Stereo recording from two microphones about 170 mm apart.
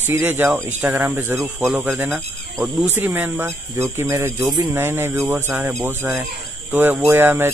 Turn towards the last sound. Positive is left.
turn(degrees=-15)  # may be behind; listen again after turning